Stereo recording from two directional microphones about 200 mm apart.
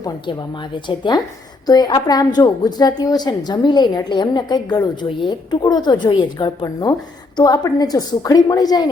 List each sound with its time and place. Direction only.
0.0 s a woman's voice: 25° left (ahead or behind)